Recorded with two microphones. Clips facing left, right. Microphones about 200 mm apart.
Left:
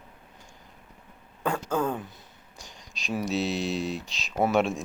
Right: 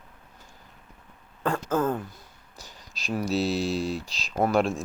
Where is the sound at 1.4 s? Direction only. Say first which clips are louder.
Right 2 dB; centre (ahead or behind).